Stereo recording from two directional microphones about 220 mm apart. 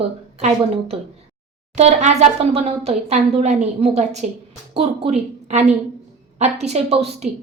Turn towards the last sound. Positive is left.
turn(degrees=-25)  # may be behind; listen again after turning